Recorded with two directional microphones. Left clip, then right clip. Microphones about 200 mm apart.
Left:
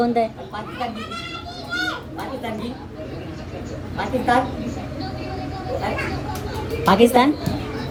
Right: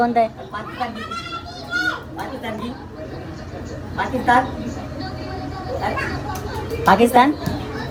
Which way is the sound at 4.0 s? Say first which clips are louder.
Right 3 dB; centre (ahead or behind).